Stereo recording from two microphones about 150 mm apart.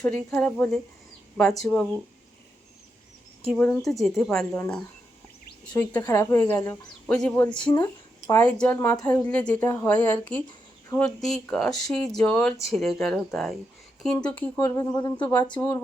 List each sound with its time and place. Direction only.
0.0 s speech: 5° left (ahead or behind)
3.5 s speech: 5° left (ahead or behind)
5.9 s speech: 15° left (ahead or behind)
14.8 s speech: 25° left (ahead or behind)
15.2 s speech: 10° left (ahead or behind)